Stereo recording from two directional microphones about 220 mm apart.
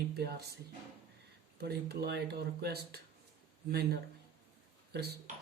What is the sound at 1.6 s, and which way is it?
Speech, 45° right (ahead or behind).